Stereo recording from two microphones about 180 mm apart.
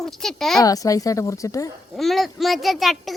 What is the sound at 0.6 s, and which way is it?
A woman's voice, 20° left (ahead or behind).